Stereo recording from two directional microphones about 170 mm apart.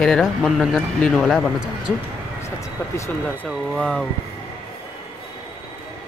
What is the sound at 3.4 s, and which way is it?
Speech, centre (ahead or behind).